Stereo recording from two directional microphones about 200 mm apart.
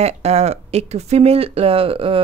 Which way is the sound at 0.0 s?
30° right (ahead or behind).